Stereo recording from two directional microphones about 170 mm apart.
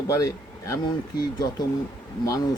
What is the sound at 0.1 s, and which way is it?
Speech, 20° left (ahead or behind).